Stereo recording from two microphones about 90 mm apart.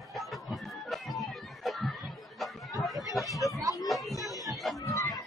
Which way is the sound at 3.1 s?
Centre (ahead or behind).